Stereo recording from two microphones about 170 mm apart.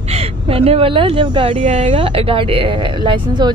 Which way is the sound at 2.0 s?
35° right (ahead or behind).